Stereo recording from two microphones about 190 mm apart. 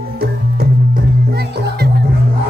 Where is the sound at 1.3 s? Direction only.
60° right (ahead or behind).